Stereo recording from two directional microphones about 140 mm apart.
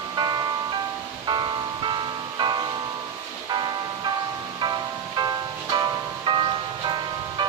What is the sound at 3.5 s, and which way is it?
Music, 30° right (ahead or behind).